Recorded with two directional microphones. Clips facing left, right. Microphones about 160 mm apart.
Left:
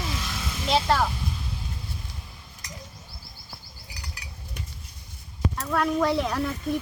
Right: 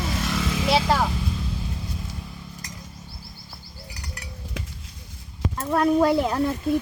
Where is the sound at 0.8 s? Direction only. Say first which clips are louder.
Right 1 dB; 10° right (ahead or behind).